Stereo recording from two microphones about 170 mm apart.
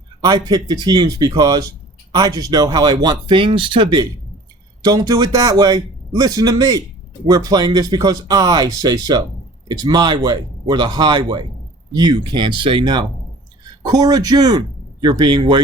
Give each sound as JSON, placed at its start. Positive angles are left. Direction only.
{"t": 0.3, "sound": "a man's voice", "side_deg": -20}